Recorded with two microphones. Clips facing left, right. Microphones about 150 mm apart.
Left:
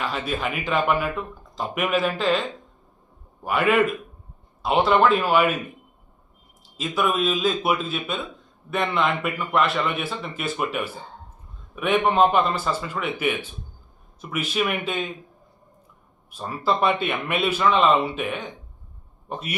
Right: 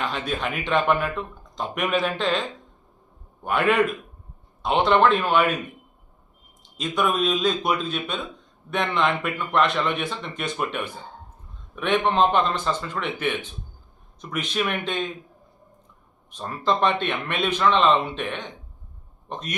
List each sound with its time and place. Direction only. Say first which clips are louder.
0.0 s speech: even; 5° left (ahead or behind)
3.4 s speech: left 1 dB; centre (ahead or behind)
6.6 s a man's voice: even; 5° left (ahead or behind)
16.3 s a man's voice: even; 5° left (ahead or behind)